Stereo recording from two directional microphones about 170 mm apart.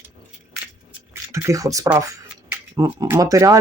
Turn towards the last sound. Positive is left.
turn(degrees=-20)  # may be behind; listen again after turning